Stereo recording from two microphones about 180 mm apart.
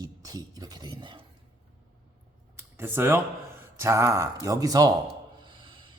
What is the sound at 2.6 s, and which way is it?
Computer keyboard, 10° right (ahead or behind).